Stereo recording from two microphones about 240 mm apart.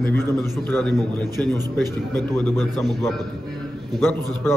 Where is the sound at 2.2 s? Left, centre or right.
Centre.